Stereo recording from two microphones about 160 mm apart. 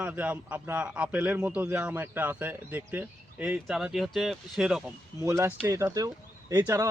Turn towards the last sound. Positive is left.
turn(degrees=-20)  # may be behind; listen again after turning